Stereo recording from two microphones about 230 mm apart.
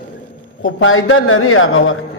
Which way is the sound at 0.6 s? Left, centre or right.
Left.